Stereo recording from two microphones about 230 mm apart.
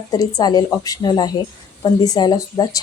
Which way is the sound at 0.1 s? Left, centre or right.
Centre.